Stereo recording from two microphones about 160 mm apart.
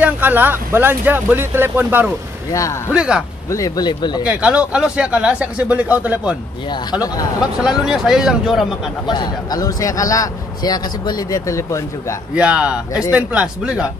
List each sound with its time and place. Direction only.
0.0 s speech: 10° right (ahead or behind)
3.4 s a man's voice: 20° left (ahead or behind)
4.2 s speech: 5° right (ahead or behind)
6.7 s a man's voice: 25° left (ahead or behind)
7.6 s speech: centre (ahead or behind)
9.0 s a man's voice: 25° left (ahead or behind)
12.4 s speech: 5° right (ahead or behind)